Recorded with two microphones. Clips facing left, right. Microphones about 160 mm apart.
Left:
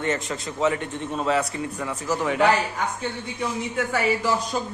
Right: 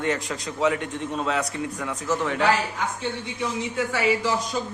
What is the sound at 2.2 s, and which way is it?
Speech, 15° left (ahead or behind).